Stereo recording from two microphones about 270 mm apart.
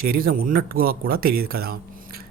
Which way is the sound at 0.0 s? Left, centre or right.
Right.